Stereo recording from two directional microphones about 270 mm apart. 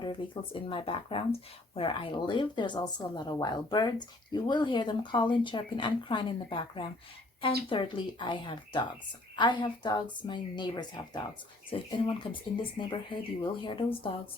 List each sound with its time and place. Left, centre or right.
0.0 s speech: centre